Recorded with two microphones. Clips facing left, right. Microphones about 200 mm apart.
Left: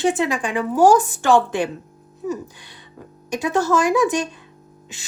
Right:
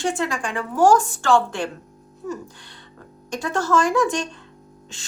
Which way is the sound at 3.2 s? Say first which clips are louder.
Left 4 dB; 20° left (ahead or behind).